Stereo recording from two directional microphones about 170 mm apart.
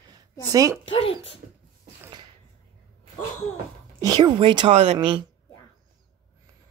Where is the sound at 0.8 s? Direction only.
30° left (ahead or behind).